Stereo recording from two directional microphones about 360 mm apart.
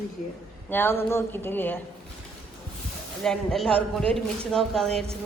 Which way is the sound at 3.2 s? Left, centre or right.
Centre.